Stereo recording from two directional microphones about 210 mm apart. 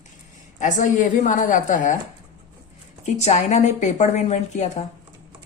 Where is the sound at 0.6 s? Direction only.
35° left (ahead or behind).